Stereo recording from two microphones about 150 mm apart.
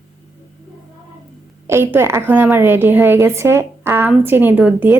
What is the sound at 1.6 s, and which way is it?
A woman's voice, 15° right (ahead or behind).